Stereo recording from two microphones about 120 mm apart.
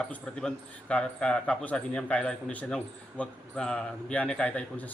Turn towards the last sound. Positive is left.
turn(degrees=10)  # may be behind; listen again after turning